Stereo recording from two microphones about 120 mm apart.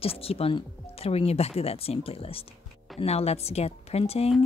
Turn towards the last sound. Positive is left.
turn(degrees=55)  # may be behind; listen again after turning